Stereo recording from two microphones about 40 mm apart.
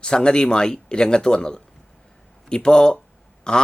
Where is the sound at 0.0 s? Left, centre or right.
Left.